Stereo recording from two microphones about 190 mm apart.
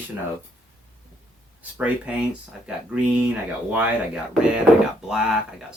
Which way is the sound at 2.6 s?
5° right (ahead or behind).